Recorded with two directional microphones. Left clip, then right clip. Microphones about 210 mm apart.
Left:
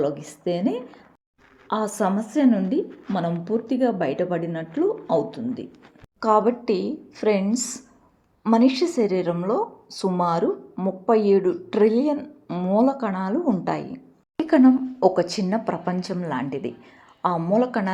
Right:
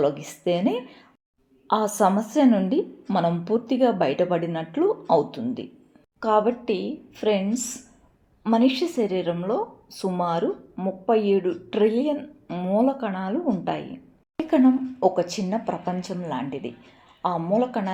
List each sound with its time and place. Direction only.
0.0 s a woman's voice: 15° left (ahead or behind)